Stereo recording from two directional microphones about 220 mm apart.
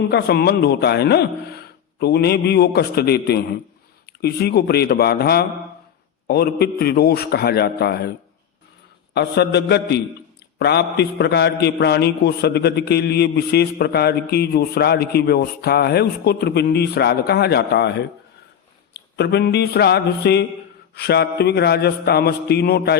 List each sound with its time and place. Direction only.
0.1 s a man's voice: 50° left (ahead or behind)
9.1 s a man's voice: 50° left (ahead or behind)
19.1 s a man's voice: 50° left (ahead or behind)